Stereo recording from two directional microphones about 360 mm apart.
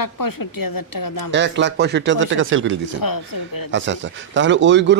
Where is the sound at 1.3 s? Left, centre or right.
Right.